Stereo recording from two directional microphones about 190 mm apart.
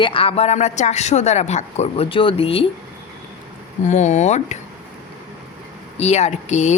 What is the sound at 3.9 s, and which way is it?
Speech, 40° left (ahead or behind).